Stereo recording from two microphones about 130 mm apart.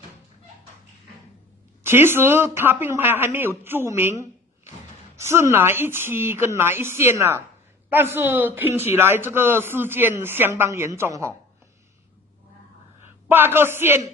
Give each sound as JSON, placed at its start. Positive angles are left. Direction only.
{"t": 1.8, "sound": "speech", "side_deg": -20}
{"t": 13.3, "sound": "speech", "side_deg": -15}